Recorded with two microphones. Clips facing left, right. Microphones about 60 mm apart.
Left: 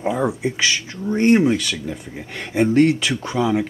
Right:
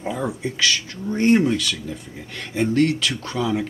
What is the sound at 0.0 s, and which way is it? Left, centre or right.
Speech, centre.